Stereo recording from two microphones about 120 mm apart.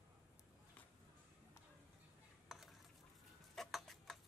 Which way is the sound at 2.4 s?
Centre (ahead or behind).